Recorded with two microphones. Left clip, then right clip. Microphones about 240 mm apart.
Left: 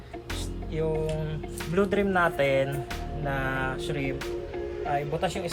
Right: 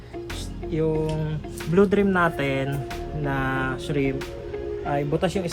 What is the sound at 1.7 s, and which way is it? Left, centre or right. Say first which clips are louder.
Speech: right 5 dB; centre.